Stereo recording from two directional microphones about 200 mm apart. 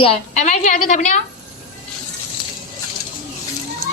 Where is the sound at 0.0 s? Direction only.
30° left (ahead or behind).